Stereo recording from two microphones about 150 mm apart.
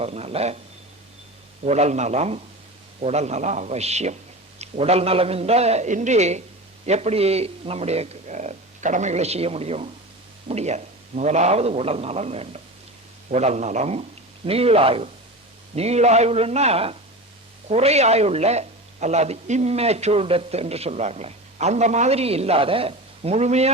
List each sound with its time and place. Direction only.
0.0 s speech: 45° right (ahead or behind)
1.6 s speech: 50° right (ahead or behind)